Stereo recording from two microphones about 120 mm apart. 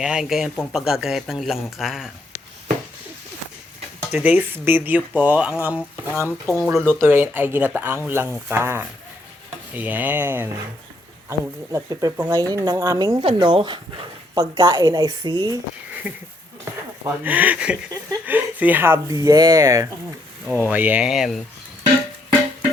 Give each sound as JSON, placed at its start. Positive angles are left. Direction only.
{"t": 0.0, "sound": "speech", "side_deg": -5}
{"t": 4.1, "sound": "speech", "side_deg": -15}
{"t": 13.2, "sound": "speech", "side_deg": -45}
{"t": 16.1, "sound": "speech", "side_deg": -15}
{"t": 19.1, "sound": "speech", "side_deg": -30}
{"t": 20.5, "sound": "speech", "side_deg": -15}